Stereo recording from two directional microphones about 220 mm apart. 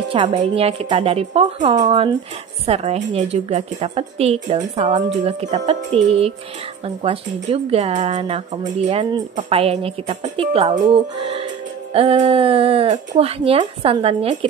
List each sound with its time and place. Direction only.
0.1 s speech: 25° right (ahead or behind)